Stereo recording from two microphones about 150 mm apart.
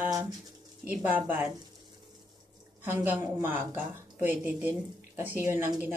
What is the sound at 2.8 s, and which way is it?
Speech, 10° right (ahead or behind).